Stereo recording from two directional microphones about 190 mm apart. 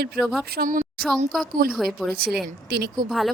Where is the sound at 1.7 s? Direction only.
Centre (ahead or behind).